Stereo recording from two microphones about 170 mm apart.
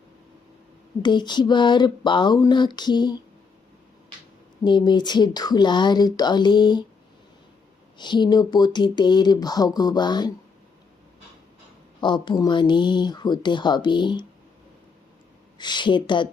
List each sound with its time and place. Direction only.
1.0 s speech: 25° left (ahead or behind)
4.6 s speech: 25° left (ahead or behind)
7.9 s speech: 25° left (ahead or behind)
11.9 s speech: 25° left (ahead or behind)
15.5 s speech: 25° left (ahead or behind)